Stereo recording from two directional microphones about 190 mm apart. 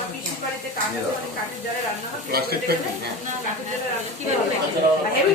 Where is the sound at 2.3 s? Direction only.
55° right (ahead or behind).